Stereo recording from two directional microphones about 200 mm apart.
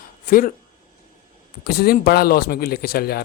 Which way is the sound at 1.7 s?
50° left (ahead or behind).